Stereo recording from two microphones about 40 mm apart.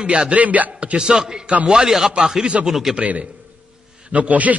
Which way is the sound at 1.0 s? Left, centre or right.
Centre.